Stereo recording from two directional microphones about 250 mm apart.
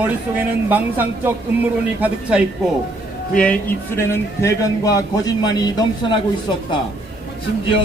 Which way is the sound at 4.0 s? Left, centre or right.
Centre.